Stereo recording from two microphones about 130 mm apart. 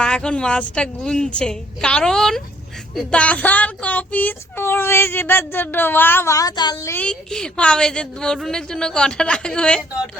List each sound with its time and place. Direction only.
0.0 s a woman's voice: 5° left (ahead or behind)
2.9 s child singing: 5° left (ahead or behind); by 6.9 s 30° left (ahead or behind)
6.9 s child singing: 10° left (ahead or behind)